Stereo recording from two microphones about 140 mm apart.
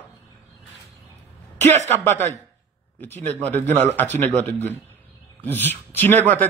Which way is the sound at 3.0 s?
15° left (ahead or behind).